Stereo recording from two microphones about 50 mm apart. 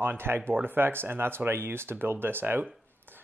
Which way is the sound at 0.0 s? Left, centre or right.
Right.